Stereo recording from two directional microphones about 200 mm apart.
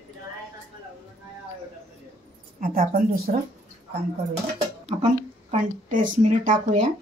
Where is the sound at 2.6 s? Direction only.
45° right (ahead or behind).